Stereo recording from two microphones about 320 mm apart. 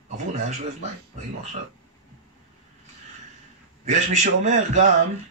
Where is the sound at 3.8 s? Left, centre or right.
Right.